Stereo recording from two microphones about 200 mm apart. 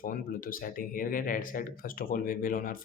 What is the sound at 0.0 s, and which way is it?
Speech, 45° left (ahead or behind).